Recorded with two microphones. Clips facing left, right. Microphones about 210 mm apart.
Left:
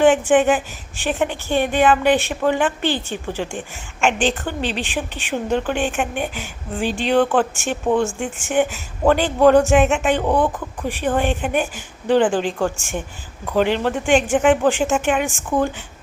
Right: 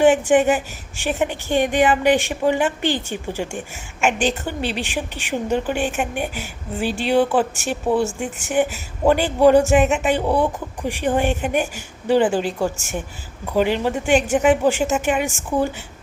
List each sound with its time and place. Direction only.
0.3 s speech: 10° right (ahead or behind)
12.7 s speech: 40° right (ahead or behind)
13.4 s speech: 10° right (ahead or behind)